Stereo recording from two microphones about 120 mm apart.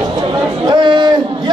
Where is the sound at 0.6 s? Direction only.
40° right (ahead or behind).